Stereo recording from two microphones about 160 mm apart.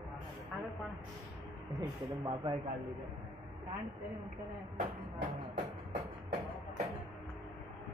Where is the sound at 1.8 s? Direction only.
25° right (ahead or behind).